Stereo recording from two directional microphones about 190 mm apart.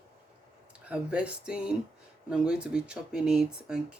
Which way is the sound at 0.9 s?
5° right (ahead or behind).